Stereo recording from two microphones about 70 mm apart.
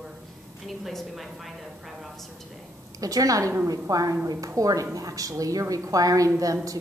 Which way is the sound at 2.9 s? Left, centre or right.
Right.